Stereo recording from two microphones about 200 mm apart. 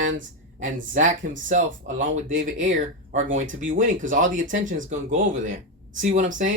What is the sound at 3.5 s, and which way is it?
Speech, 40° right (ahead or behind).